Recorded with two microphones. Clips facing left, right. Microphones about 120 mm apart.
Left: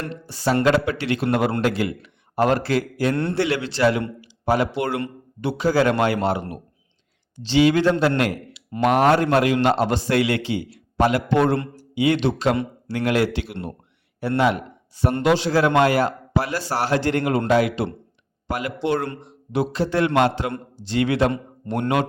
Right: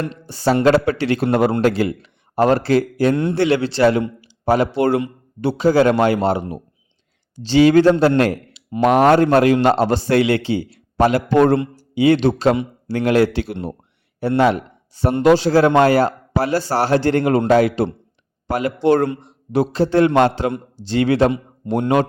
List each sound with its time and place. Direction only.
0.0 s a man's voice: 25° right (ahead or behind)
7.4 s a man's voice: 40° right (ahead or behind)
21.6 s speech: 15° right (ahead or behind)